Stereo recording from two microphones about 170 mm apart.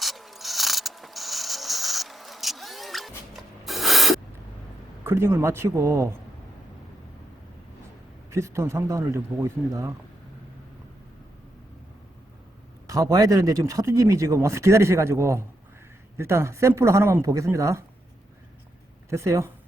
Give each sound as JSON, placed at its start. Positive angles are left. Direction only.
{"t": 0.0, "sound": "mechanisms", "side_deg": 0}
{"t": 3.6, "sound": "a sound", "side_deg": 0}
{"t": 5.0, "sound": "speech", "side_deg": -15}
{"t": 8.3, "sound": "speech", "side_deg": -15}
{"t": 12.9, "sound": "speech", "side_deg": -20}
{"t": 19.1, "sound": "speech", "side_deg": -15}